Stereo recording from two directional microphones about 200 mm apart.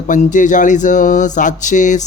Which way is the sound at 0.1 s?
40° left (ahead or behind).